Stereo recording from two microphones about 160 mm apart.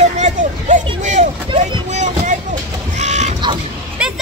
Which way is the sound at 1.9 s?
45° right (ahead or behind).